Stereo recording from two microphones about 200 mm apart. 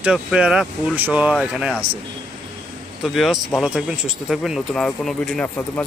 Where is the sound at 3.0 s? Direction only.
Centre (ahead or behind).